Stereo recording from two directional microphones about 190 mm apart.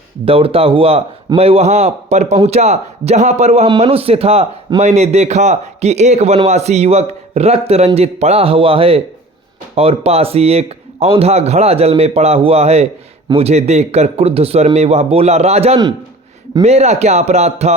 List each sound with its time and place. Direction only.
0.3 s speech: 30° right (ahead or behind)